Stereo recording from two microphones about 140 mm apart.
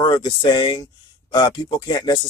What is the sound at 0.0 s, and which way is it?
Speech, 30° left (ahead or behind).